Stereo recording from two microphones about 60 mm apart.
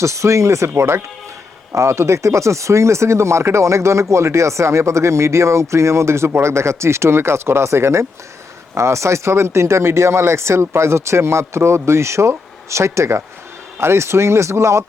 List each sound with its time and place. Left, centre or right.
0.0 s speech: right